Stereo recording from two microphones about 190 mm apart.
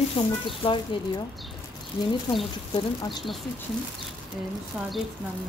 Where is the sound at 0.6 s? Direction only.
30° left (ahead or behind).